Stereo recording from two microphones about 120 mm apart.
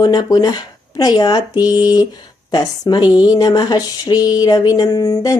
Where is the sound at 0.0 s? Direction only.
35° left (ahead or behind).